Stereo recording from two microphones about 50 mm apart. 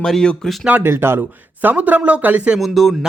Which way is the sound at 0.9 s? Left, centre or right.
Right.